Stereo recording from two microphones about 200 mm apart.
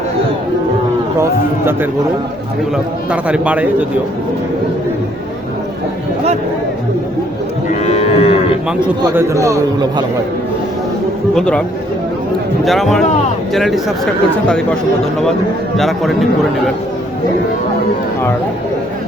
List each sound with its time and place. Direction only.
1.2 s speech: 10° right (ahead or behind)
3.1 s speech: 5° right (ahead or behind)
7.7 s cattle: 35° left (ahead or behind)
9.0 s speech: 15° right (ahead or behind)
11.3 s speech: 5° left (ahead or behind)
12.6 s speech: centre (ahead or behind)
15.8 s speech: centre (ahead or behind)